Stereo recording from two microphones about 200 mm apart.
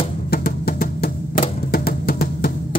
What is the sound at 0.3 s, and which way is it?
Music, 50° left (ahead or behind).